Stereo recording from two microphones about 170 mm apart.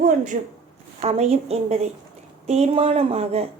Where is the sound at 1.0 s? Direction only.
35° right (ahead or behind).